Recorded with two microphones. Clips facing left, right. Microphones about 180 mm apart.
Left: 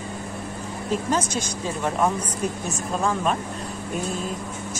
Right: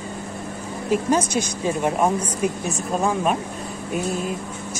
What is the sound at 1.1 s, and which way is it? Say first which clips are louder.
A woman's voice: right 4 dB; 15° right (ahead or behind).